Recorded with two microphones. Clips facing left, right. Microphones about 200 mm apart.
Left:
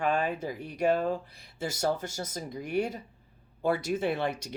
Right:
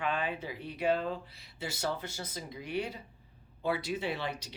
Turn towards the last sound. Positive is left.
turn(degrees=50)  # may be behind; listen again after turning